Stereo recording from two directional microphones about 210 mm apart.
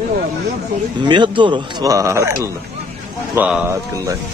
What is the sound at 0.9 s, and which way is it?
A man's voice, 20° right (ahead or behind).